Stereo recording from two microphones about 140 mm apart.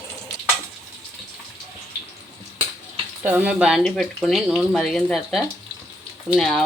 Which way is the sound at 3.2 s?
10° right (ahead or behind).